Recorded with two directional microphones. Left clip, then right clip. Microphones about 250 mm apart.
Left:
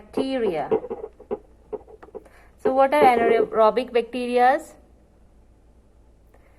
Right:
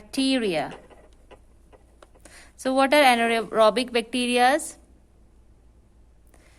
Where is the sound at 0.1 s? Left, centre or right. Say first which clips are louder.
Even; right.